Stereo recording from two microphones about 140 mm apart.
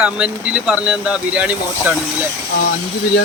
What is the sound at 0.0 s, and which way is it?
Speech, 10° right (ahead or behind).